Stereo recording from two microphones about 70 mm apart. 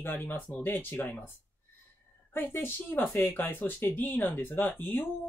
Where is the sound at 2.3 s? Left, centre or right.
Left.